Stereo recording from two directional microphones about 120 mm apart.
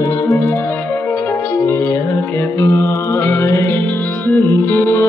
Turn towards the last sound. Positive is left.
turn(degrees=20)  # may be behind; listen again after turning